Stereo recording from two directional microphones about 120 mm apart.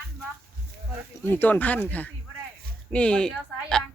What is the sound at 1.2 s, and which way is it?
Speech, 15° left (ahead or behind).